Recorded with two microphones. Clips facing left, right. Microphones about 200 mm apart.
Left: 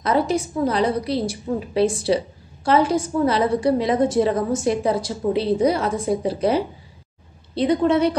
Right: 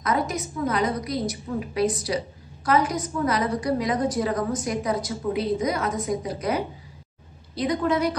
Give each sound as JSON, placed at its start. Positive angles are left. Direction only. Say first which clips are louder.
{"t": 0.0, "sound": "a woman's voice", "louder": "left 6 dB", "side_deg": 30}